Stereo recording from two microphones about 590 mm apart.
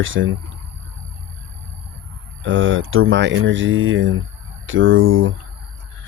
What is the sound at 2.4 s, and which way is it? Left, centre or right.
Speech, centre.